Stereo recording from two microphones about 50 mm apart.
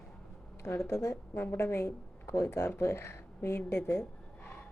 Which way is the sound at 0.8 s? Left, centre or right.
Left.